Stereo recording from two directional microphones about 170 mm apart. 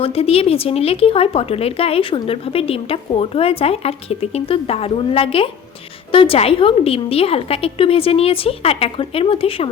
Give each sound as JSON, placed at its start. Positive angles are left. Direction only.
{"t": 0.0, "sound": "speech", "side_deg": 35}